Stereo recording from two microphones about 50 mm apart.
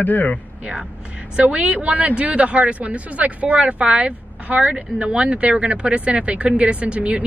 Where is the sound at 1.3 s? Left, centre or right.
Right.